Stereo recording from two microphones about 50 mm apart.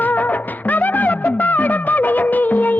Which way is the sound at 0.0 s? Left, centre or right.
Left.